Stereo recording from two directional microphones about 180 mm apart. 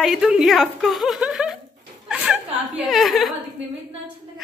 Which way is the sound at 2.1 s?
5° right (ahead or behind).